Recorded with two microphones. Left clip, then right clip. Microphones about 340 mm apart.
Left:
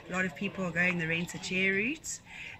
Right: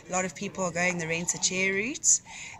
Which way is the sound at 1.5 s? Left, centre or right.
Centre.